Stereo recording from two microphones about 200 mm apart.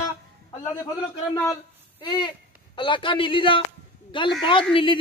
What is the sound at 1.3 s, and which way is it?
A man's voice, 15° left (ahead or behind).